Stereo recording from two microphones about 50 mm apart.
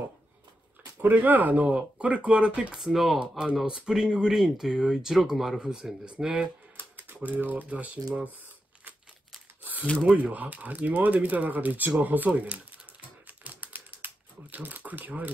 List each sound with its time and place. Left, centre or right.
1.0 s speech: right; by 2.8 s centre
2.8 s speech: centre
3.2 s speech: right
7.2 s speech: right
9.6 s a sound: right
10.1 s speech: right
13.3 s typewriter: right